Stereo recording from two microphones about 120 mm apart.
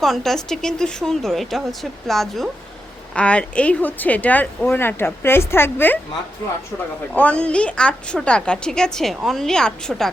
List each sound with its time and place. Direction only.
0.0 s a woman's voice: centre (ahead or behind); by 6.0 s 20° left (ahead or behind)
7.2 s a woman's voice: 10° left (ahead or behind)